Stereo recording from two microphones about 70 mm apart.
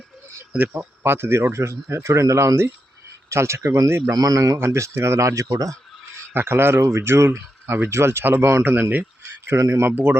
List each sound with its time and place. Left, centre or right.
0.5 s speech: right
4.1 s a man's voice: right
4.6 s a man's voice: right
6.3 s speech: right
9.6 s speech: right
9.9 s speech: right